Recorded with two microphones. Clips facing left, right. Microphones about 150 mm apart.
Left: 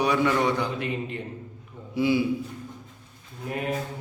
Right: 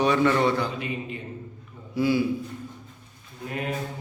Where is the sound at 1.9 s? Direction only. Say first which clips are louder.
Even; 15° left (ahead or behind).